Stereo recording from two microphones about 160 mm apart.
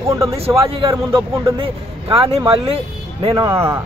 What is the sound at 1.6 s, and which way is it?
Speech, 35° right (ahead or behind).